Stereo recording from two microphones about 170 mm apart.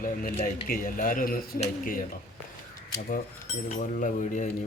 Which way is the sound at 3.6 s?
45° left (ahead or behind).